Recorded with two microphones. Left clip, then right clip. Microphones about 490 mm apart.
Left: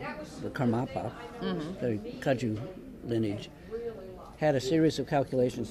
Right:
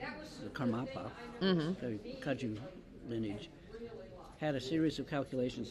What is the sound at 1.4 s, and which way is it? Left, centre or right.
Speech, right.